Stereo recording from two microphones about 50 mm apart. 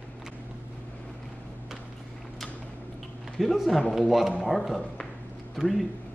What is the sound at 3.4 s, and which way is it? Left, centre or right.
Speech, centre.